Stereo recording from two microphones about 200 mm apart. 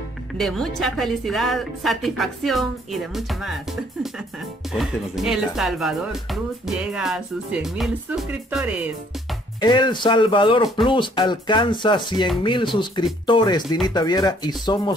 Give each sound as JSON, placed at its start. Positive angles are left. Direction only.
{"t": 0.4, "sound": "speech", "side_deg": 0}
{"t": 9.6, "sound": "speech", "side_deg": 20}